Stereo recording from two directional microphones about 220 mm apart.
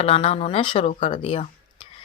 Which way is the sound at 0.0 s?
30° left (ahead or behind).